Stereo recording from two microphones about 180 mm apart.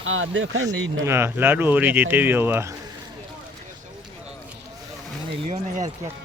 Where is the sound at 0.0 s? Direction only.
90° right.